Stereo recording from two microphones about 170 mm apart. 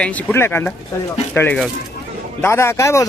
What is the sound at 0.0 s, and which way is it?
A man's voice, 10° left (ahead or behind).